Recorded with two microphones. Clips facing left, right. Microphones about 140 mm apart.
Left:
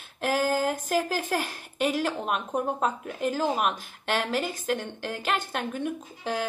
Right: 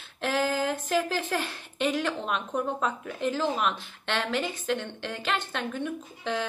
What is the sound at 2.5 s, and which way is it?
A woman's voice, 40° left (ahead or behind).